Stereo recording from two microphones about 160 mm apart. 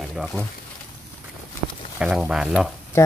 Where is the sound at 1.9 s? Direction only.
5° right (ahead or behind).